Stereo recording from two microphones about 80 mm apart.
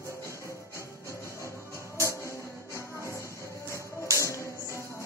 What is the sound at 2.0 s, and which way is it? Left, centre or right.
Music, left.